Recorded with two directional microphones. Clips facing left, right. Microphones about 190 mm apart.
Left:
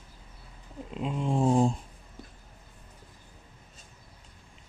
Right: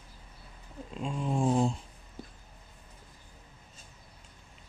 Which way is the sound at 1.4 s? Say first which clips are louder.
Left 3 dB; 40° left (ahead or behind).